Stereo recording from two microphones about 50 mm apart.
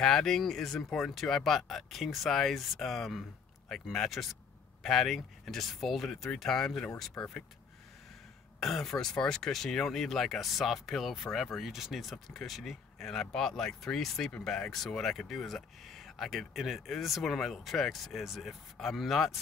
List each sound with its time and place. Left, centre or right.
0.0 s speech: centre
7.2 s speech: left
8.5 s speech: centre